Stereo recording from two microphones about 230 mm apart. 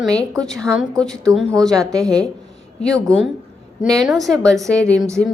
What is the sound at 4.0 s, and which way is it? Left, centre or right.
Speech, centre.